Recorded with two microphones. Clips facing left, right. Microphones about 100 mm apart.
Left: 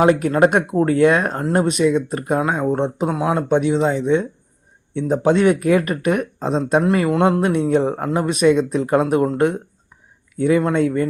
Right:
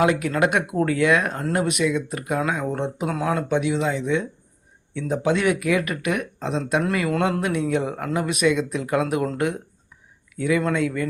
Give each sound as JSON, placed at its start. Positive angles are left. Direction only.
{"t": 0.0, "sound": "speech", "side_deg": 35}
{"t": 7.1, "sound": "speech", "side_deg": 25}
{"t": 10.3, "sound": "speech", "side_deg": 35}